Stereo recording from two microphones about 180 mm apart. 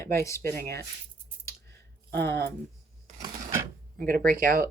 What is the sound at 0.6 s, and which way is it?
Speech, 65° right (ahead or behind).